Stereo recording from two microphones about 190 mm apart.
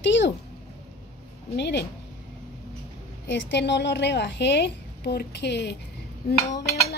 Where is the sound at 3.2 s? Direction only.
65° left (ahead or behind).